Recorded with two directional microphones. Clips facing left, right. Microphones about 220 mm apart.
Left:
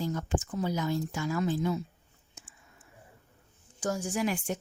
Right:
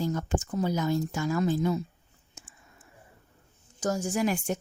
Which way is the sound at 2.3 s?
40° right (ahead or behind).